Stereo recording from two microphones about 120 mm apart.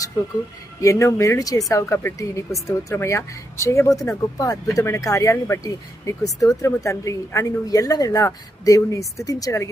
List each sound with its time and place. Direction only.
0.8 s speech: 25° left (ahead or behind)